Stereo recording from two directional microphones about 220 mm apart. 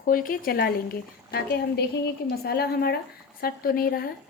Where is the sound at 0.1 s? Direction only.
40° left (ahead or behind).